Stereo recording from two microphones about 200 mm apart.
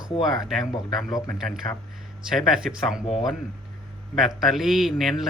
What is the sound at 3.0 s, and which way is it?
Speech, 25° left (ahead or behind).